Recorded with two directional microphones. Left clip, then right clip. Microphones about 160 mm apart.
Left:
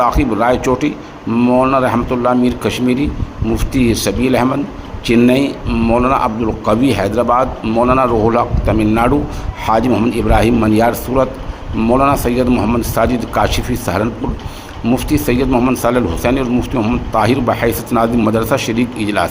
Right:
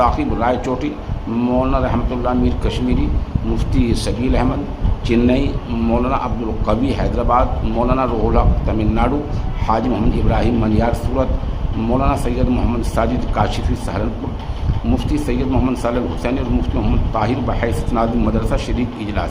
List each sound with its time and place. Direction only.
0.0 s a man's voice: 30° left (ahead or behind)